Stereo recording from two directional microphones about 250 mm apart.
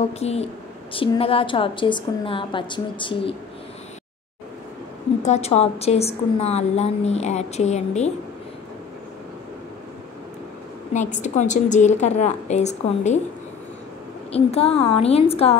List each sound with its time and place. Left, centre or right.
0.1 s a woman's voice: left
5.2 s a woman's voice: left
10.9 s a woman's voice: left
14.3 s a woman's voice: left